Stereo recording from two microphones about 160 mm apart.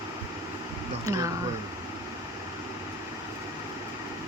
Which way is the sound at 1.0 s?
20° right (ahead or behind).